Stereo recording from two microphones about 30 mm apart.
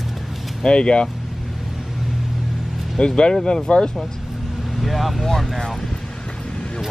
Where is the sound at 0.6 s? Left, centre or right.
Left.